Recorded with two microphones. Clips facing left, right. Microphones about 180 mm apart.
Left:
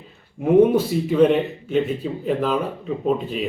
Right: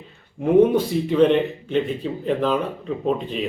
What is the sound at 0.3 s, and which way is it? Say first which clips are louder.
A man's voice: left 1 dB; 5° left (ahead or behind).